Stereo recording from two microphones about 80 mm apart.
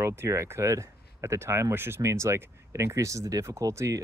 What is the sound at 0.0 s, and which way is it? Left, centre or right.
Speech, right.